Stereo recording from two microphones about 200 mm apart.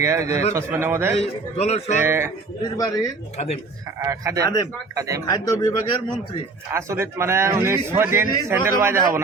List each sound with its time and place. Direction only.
0.0 s a man's voice: 15° right (ahead or behind)
1.2 s a man's voice: 30° left (ahead or behind)
2.0 s a man's voice: 10° right (ahead or behind)
2.7 s speech: 20° left (ahead or behind)
3.3 s a man's voice: 30° left (ahead or behind)
4.0 s a man's voice: 15° right (ahead or behind)
5.3 s speech: 20° left (ahead or behind)
6.7 s a man's voice: 15° right (ahead or behind)